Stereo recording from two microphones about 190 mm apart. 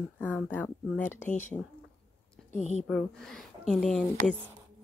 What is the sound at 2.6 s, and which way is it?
Speech, 40° left (ahead or behind).